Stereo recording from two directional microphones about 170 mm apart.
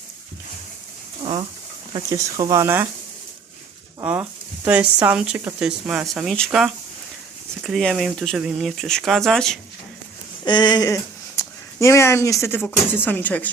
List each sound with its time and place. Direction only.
1.2 s speech: 30° right (ahead or behind)
4.0 s speech: 10° right (ahead or behind)
10.4 s speech: 25° left (ahead or behind); by 13.5 s 10° left (ahead or behind)